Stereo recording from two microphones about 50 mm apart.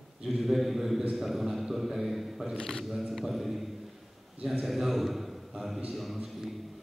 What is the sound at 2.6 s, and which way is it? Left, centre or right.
Speech, centre.